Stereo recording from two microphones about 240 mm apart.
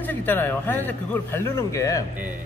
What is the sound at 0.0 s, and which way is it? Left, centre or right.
A man's voice, centre.